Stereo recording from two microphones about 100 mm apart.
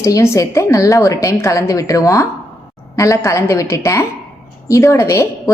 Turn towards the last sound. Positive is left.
turn(degrees=30)  # may be behind; listen again after turning